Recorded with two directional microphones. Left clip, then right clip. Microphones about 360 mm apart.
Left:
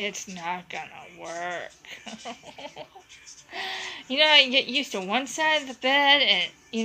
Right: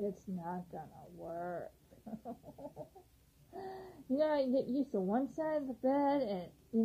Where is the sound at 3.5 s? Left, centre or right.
Centre.